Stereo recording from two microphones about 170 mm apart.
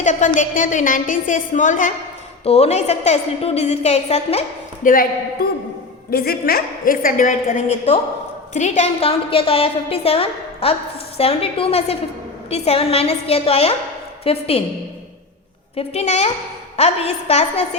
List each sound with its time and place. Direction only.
0.0 s a sound: 45° left (ahead or behind)
0.3 s a woman's voice: 50° left (ahead or behind)
6.1 s a woman's voice: 60° left (ahead or behind); by 14.6 s 35° left (ahead or behind)
15.7 s a woman's voice: 40° left (ahead or behind)